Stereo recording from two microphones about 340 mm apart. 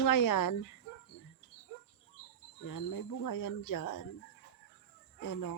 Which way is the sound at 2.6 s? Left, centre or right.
Left.